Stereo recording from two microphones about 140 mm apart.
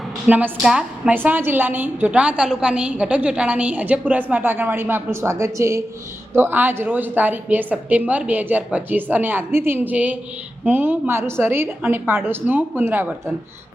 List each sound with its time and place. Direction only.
0.3 s a woman's voice: 10° right (ahead or behind)